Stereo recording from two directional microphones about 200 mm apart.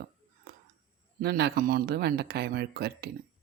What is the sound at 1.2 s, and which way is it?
Speech, 55° right (ahead or behind).